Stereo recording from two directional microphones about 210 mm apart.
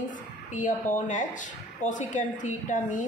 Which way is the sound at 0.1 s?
40° left (ahead or behind).